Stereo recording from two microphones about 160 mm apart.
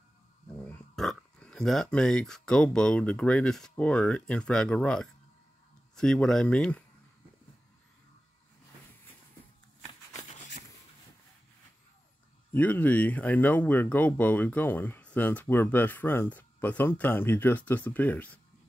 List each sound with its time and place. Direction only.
0.7 s speech: 5° left (ahead or behind)
10.2 s a sound: 50° left (ahead or behind)
12.5 s speech: 10° left (ahead or behind)